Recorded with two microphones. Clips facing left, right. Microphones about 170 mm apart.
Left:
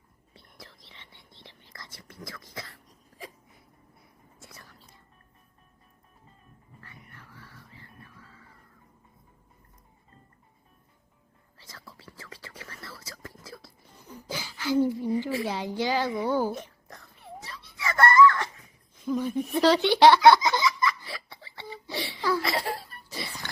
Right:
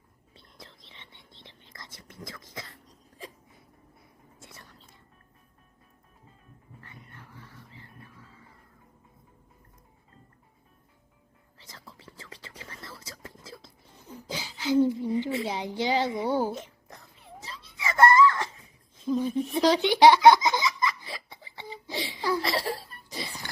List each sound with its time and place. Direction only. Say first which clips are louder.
0.3 s whispering: even; 20° right (ahead or behind)
4.4 s whispering: even; 25° right (ahead or behind)
6.8 s music: right 1 dB; 20° right (ahead or behind)
11.6 s whispering: even; 20° right (ahead or behind)
14.8 s speech: even; 20° right (ahead or behind)
17.4 s a sound: even; 20° right (ahead or behind)